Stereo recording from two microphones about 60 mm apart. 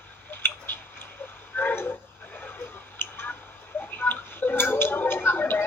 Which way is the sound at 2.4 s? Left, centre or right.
Left.